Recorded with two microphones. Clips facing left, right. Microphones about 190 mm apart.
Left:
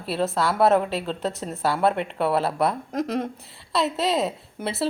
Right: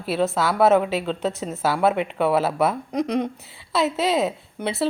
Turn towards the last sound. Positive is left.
turn(degrees=0)  # may be behind; listen again after turning